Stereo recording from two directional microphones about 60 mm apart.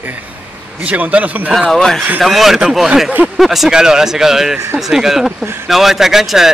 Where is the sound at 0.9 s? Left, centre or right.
Right.